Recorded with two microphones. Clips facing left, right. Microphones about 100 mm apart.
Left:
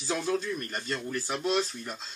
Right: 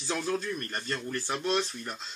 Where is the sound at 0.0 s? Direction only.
10° left (ahead or behind).